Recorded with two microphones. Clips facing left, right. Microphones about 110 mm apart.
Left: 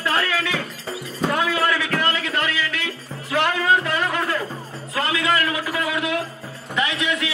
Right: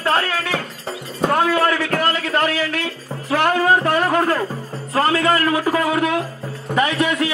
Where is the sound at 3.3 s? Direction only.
40° right (ahead or behind).